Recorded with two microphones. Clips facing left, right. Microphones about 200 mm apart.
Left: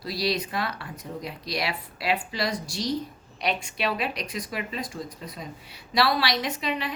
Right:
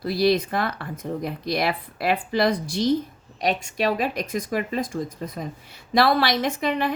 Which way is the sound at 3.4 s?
45° right (ahead or behind).